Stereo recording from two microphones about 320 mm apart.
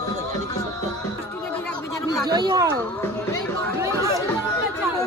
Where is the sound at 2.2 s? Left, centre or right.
Centre.